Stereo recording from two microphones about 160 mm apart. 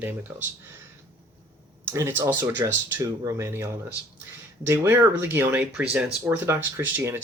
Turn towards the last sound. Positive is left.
turn(degrees=-15)  # may be behind; listen again after turning